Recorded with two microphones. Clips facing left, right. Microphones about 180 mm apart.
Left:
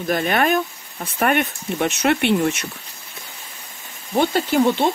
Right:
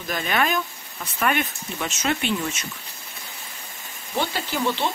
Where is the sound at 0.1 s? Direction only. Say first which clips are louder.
Left 5 dB; 50° left (ahead or behind).